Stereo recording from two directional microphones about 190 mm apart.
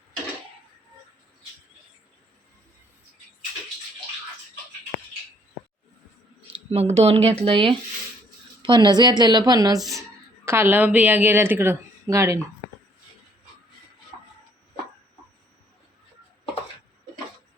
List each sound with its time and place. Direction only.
6.7 s a woman's voice: 30° right (ahead or behind); by 12.4 s 15° right (ahead or behind)